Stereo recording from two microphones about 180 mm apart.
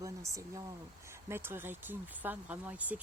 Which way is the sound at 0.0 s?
20° right (ahead or behind).